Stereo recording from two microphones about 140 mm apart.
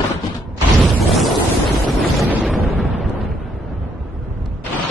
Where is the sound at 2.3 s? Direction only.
5° right (ahead or behind).